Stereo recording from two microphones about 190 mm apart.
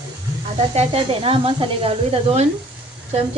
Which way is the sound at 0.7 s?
30° right (ahead or behind).